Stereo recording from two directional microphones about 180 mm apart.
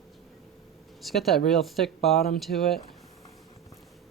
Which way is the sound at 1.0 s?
Centre (ahead or behind).